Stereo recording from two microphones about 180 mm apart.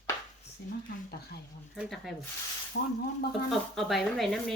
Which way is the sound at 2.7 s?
70° left (ahead or behind).